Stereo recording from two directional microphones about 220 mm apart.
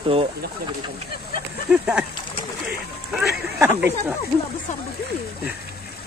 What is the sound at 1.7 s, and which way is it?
Speech, 5° right (ahead or behind).